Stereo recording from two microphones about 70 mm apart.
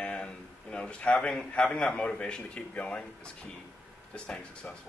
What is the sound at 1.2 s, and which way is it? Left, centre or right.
A man's voice, centre.